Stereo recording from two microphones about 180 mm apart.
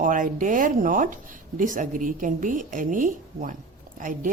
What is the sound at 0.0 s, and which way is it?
Speech, 50° right (ahead or behind).